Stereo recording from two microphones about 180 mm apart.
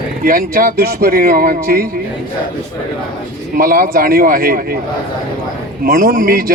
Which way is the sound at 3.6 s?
55° right (ahead or behind).